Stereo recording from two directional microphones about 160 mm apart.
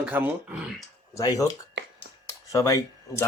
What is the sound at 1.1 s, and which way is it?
Speech, 20° left (ahead or behind).